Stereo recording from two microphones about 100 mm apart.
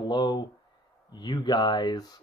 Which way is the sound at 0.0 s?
45° left (ahead or behind).